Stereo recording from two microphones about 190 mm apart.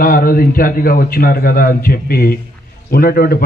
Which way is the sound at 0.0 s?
50° left (ahead or behind).